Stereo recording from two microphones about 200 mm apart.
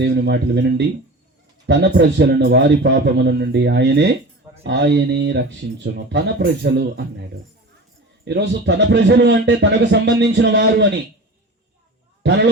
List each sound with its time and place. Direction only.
0.0 s a man's voice: 60° right (ahead or behind)
8.2 s a man's voice: 60° right (ahead or behind)